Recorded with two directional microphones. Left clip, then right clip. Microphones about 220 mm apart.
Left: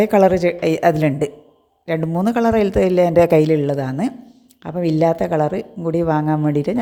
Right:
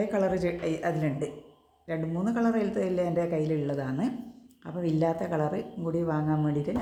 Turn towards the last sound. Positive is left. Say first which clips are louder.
# left 11 dB
turn(degrees=40)  # may be behind; listen again after turning